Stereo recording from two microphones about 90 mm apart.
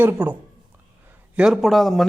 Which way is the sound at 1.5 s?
Centre (ahead or behind).